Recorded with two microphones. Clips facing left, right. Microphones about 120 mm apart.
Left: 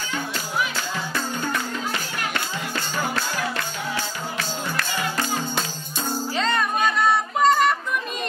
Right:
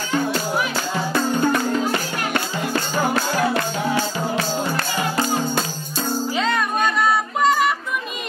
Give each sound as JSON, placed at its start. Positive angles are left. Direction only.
{"t": 0.1, "sound": "music", "side_deg": -40}
{"t": 6.3, "sound": "music", "side_deg": -5}